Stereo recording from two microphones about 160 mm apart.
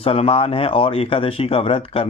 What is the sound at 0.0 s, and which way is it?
Speech, 35° left (ahead or behind).